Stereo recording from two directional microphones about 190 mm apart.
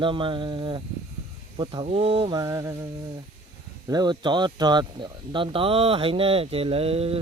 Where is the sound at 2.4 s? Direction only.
15° right (ahead or behind).